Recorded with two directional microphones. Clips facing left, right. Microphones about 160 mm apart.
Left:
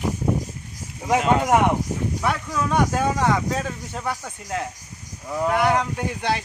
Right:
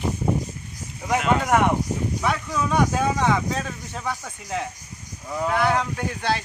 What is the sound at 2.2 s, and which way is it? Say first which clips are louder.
Speech: even; 5° left (ahead or behind).